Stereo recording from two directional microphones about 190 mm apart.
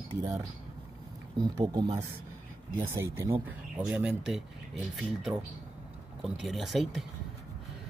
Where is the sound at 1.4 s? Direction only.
20° right (ahead or behind).